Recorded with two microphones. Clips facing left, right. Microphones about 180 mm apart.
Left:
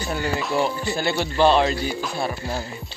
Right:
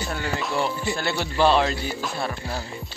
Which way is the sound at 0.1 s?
Centre (ahead or behind).